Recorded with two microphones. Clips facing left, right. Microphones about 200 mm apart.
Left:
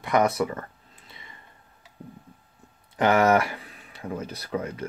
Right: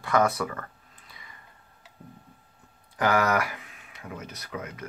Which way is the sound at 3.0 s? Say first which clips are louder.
Left 4 dB; 25° left (ahead or behind).